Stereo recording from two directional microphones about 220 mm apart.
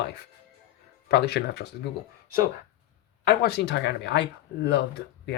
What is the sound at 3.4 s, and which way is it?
Speech, 50° left (ahead or behind).